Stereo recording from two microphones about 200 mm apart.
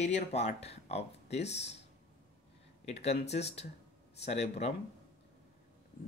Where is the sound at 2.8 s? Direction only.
30° left (ahead or behind).